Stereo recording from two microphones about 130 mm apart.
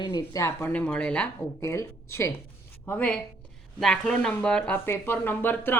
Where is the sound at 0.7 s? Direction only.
10° left (ahead or behind).